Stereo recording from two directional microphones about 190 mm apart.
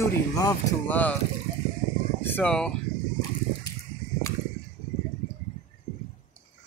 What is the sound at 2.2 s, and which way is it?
Speech, 10° left (ahead or behind).